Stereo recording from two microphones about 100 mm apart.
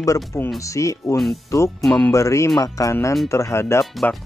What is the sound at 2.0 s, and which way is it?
Speech, 30° left (ahead or behind).